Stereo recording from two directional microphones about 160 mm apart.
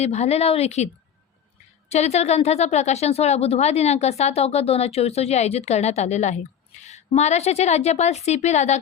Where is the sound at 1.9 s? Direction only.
45° left (ahead or behind).